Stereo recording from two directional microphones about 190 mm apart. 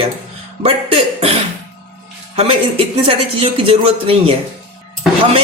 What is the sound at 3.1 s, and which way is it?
Speech, 30° right (ahead or behind).